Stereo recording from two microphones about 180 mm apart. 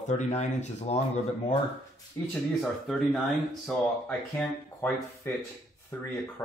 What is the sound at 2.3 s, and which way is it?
Speech, centre (ahead or behind).